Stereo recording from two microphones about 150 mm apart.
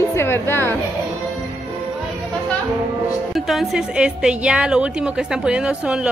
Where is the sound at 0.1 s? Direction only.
15° left (ahead or behind).